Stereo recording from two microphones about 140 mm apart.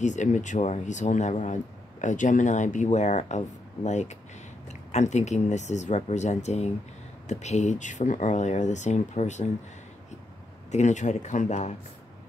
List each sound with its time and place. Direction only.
0.0 s speech: 60° left (ahead or behind)
10.7 s speech: 60° left (ahead or behind)